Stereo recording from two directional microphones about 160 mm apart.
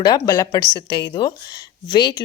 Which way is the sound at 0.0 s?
25° left (ahead or behind).